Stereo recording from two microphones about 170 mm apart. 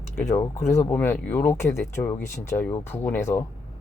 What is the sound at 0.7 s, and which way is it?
Speech, 10° left (ahead or behind).